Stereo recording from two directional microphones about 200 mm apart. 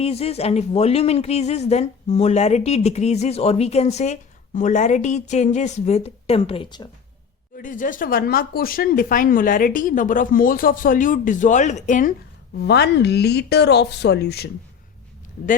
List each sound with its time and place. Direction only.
0.0 s speech: 30° left (ahead or behind)
7.5 s speech: 40° left (ahead or behind)
12.6 s speech: 55° left (ahead or behind)